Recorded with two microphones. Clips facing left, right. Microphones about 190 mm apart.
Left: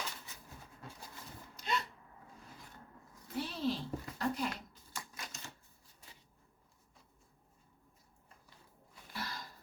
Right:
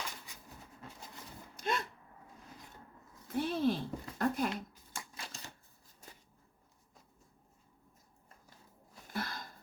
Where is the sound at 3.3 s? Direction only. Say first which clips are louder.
Right 5 dB; 55° right (ahead or behind).